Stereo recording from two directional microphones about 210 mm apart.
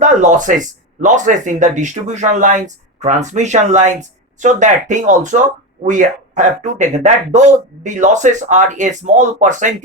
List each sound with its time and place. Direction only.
0.0 s speech: 35° right (ahead or behind)